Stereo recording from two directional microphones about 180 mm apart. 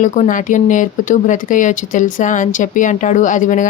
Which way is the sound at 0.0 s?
45° left (ahead or behind).